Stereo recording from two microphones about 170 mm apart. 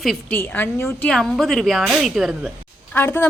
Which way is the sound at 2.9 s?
10° left (ahead or behind).